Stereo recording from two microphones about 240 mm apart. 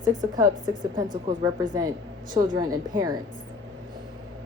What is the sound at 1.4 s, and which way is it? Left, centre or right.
A woman's voice, centre.